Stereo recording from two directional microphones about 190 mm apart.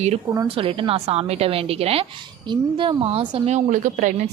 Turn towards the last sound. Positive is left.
turn(degrees=-40)  # may be behind; listen again after turning